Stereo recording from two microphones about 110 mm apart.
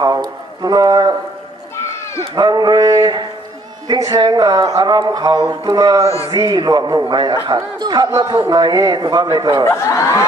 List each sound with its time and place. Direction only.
0.0 s a man's voice: 35° right (ahead or behind)
2.3 s a man's voice: 40° right (ahead or behind)
9.7 s speech: 25° left (ahead or behind)